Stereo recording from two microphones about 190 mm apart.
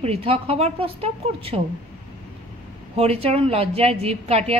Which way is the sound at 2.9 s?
30° right (ahead or behind).